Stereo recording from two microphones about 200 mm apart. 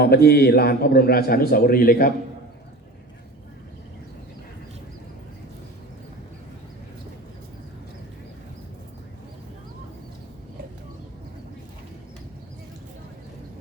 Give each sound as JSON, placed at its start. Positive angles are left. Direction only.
{"t": 0.0, "sound": "a man's voice", "side_deg": 55}